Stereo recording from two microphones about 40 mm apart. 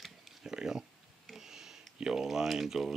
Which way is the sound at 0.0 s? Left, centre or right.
Centre.